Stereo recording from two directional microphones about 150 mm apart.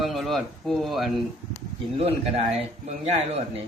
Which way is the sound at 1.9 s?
40° right (ahead or behind).